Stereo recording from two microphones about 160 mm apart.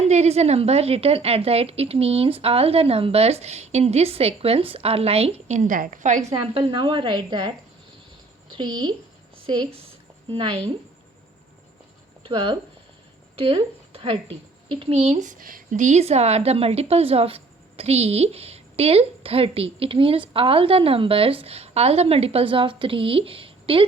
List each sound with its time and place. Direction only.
0.0 s a woman's voice: 45° right (ahead or behind)
6.4 s a woman's voice: 30° right (ahead or behind)
8.5 s a woman's voice: 25° right (ahead or behind)
10.2 s a woman's voice: 30° right (ahead or behind)
12.2 s a woman's voice: 35° right (ahead or behind)